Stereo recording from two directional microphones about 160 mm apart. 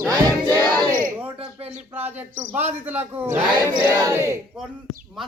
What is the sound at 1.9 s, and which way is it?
Speech, 10° right (ahead or behind).